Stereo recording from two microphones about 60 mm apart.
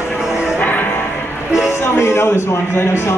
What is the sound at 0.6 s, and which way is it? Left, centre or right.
Music, left.